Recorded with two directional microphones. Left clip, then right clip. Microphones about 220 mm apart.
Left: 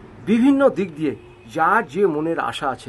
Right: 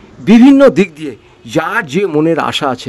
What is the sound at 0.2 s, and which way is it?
A man's voice, 45° right (ahead or behind).